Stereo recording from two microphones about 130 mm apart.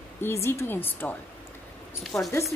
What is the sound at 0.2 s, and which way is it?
Speech, 20° left (ahead or behind).